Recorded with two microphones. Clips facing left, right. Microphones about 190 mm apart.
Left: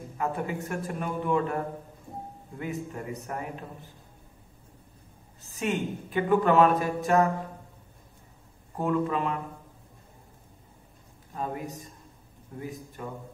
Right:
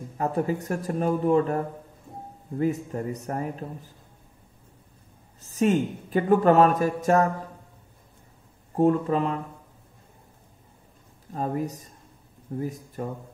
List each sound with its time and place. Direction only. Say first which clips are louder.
0.2 s a woman's voice: right 5 dB; 40° right (ahead or behind)
2.6 s a woman's voice: right 8 dB; 40° right (ahead or behind)
5.4 s a woman's voice: right 7 dB; 40° right (ahead or behind)
8.7 s a woman's voice: right 6 dB; 40° right (ahead or behind)
11.3 s a woman's voice: right 5 dB; 40° right (ahead or behind)